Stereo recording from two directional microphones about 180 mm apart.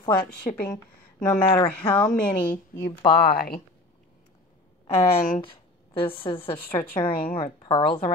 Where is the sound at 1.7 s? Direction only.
5° left (ahead or behind).